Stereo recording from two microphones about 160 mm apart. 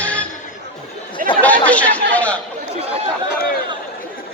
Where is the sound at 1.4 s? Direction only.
10° left (ahead or behind).